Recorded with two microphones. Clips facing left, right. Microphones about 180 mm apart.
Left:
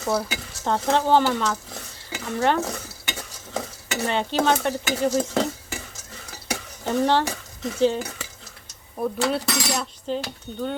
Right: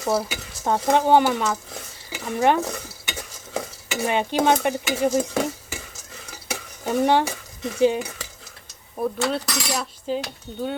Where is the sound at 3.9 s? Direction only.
15° right (ahead or behind).